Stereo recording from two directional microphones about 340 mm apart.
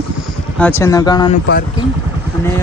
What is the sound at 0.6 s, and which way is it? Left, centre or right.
Speech, centre.